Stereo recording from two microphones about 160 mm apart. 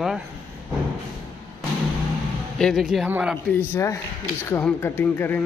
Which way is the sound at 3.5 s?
15° left (ahead or behind).